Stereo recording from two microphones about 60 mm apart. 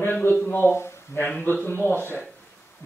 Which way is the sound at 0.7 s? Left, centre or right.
Left.